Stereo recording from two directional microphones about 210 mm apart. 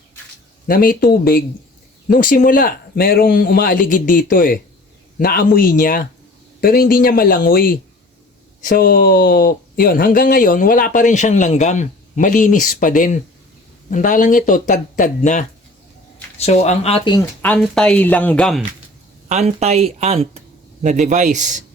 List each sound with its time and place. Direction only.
0.7 s a man's voice: 40° left (ahead or behind)
17.4 s a woman's voice: 5° left (ahead or behind)
19.3 s speech: 30° right (ahead or behind)